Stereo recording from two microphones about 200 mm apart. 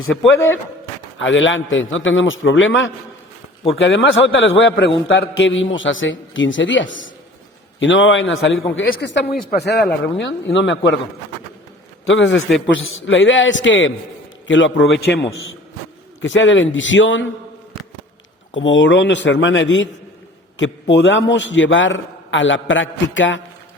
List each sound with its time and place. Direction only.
1.2 s a man's voice: 70° left (ahead or behind)
8.9 s speech: 60° left (ahead or behind)
12.0 s a man's voice: 65° left (ahead or behind)
16.2 s a man's voice: 70° left (ahead or behind)
18.5 s a man's voice: 70° left (ahead or behind)
20.9 s a man's voice: 65° left (ahead or behind)